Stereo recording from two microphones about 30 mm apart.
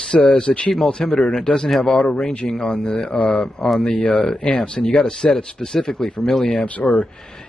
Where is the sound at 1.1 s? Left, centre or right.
Left.